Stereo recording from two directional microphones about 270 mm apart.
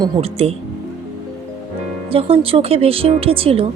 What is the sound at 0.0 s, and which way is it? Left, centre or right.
Speech, right.